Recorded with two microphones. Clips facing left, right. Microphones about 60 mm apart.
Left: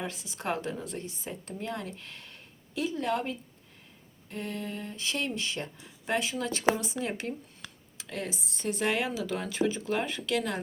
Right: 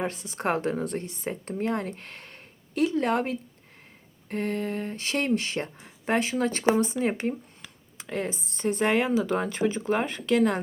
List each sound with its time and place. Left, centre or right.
0.0 s a woman's voice: right